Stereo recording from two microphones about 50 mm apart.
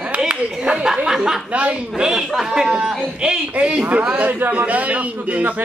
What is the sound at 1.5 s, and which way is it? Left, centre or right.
Speech, right.